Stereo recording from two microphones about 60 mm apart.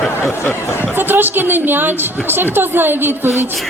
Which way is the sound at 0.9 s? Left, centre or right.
Right.